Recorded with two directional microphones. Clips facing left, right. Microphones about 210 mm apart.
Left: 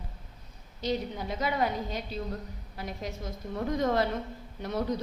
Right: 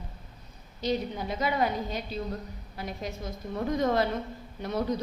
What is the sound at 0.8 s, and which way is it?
A woman's voice, 15° right (ahead or behind).